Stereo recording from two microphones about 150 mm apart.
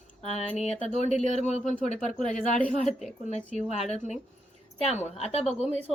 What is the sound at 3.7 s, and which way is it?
A woman's voice, 45° left (ahead or behind).